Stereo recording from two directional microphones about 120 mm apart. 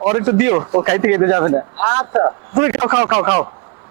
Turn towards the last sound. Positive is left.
turn(degrees=-20)  # may be behind; listen again after turning